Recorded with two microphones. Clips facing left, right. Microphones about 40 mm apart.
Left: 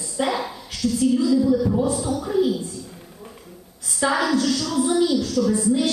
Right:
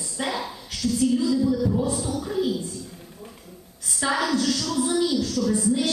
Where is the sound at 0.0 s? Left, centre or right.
Centre.